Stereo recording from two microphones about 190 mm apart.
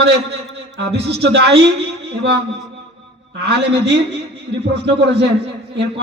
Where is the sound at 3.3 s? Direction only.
65° right (ahead or behind).